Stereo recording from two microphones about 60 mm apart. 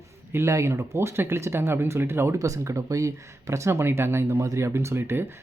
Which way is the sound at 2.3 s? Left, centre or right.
Right.